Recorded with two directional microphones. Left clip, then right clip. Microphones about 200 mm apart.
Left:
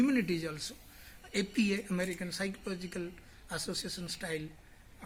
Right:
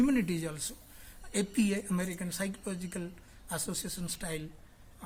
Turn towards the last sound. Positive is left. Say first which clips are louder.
# left 1 dB
turn(degrees=-60)  # may be behind; listen again after turning